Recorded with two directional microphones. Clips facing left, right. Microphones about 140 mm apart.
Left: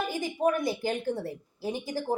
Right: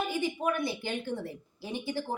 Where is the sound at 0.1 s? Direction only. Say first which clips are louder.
Left 3 dB; 40° left (ahead or behind).